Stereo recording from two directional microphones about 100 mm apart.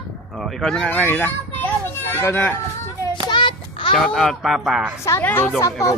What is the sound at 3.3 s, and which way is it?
Child singing, 55° left (ahead or behind).